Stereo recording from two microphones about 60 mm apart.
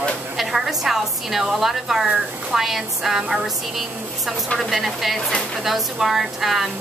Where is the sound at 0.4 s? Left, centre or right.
Centre.